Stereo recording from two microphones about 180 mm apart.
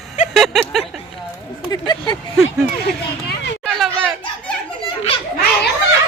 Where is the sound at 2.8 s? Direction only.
65° left (ahead or behind).